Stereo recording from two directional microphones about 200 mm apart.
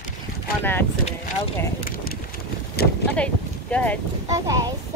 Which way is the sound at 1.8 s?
45° left (ahead or behind).